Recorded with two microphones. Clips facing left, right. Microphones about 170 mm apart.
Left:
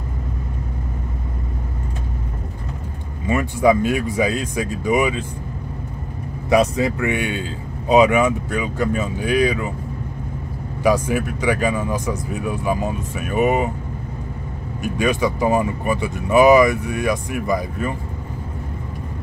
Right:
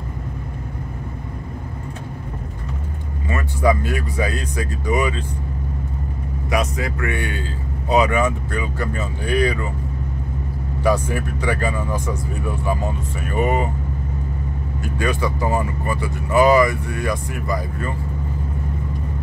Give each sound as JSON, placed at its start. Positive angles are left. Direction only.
{"t": 3.3, "sound": "speech", "side_deg": 15}
{"t": 6.5, "sound": "speech", "side_deg": 25}
{"t": 10.8, "sound": "speech", "side_deg": 10}
{"t": 14.8, "sound": "speech", "side_deg": 15}